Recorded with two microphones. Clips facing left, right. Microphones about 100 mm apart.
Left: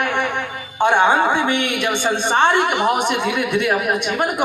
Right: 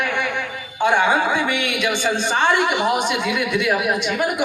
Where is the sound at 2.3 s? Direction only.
60° left (ahead or behind).